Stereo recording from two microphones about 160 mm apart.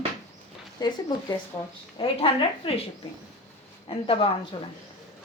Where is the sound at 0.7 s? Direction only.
25° left (ahead or behind).